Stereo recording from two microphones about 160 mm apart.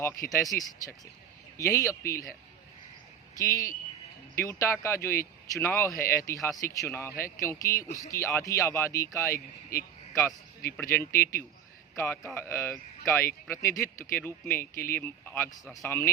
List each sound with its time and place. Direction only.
0.0 s a man's voice: 20° left (ahead or behind)
3.3 s a man's voice: 20° left (ahead or behind)